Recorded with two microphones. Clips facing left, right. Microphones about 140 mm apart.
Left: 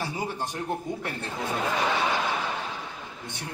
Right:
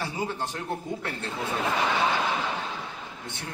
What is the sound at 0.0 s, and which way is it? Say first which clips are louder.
A man's voice: even; 15° left (ahead or behind).